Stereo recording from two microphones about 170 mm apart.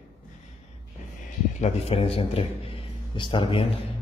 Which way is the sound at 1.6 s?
35° left (ahead or behind).